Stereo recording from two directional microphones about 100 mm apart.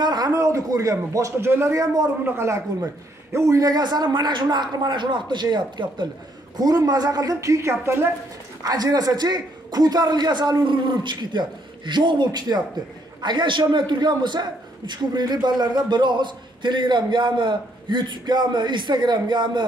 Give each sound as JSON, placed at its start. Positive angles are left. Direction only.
{"t": 0.0, "sound": "a sound", "side_deg": -45}
{"t": 0.3, "sound": "a man's voice", "side_deg": -30}
{"t": 6.5, "sound": "a man's voice", "side_deg": -40}
{"t": 8.6, "sound": "a man's voice", "side_deg": -40}